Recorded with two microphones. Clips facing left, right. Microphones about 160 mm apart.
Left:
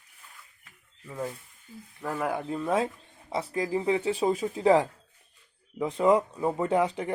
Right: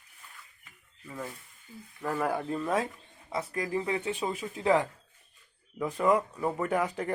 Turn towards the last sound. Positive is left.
turn(degrees=20)  # may be behind; listen again after turning